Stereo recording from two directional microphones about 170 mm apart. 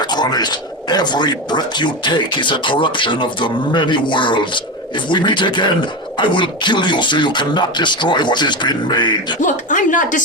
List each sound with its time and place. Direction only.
0.0 s speech: 25° left (ahead or behind)
9.4 s a woman's voice: 50° left (ahead or behind)